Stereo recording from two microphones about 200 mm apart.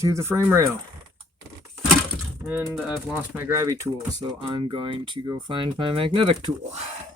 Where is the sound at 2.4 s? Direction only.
10° right (ahead or behind).